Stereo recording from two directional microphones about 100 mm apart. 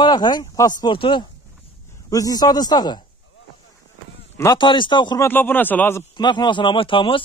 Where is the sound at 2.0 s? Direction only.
35° left (ahead or behind).